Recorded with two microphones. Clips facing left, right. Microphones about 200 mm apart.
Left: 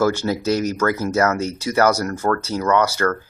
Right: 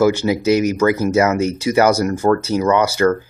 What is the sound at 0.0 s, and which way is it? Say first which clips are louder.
Speech: right 4 dB; 10° right (ahead or behind).